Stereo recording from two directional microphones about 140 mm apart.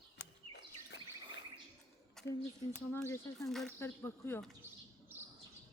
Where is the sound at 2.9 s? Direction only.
15° left (ahead or behind).